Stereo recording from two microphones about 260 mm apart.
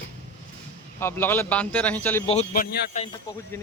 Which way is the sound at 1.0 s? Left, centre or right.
Centre.